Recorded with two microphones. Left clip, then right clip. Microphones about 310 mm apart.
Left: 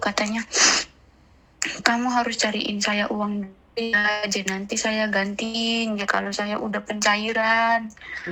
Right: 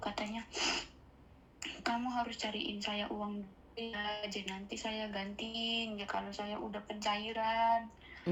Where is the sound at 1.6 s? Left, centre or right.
Left.